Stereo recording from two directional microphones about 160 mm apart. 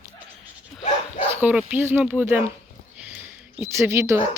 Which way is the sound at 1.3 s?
10° right (ahead or behind).